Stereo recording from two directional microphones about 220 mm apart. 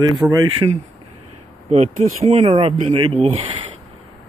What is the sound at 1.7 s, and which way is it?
Speech, 30° right (ahead or behind).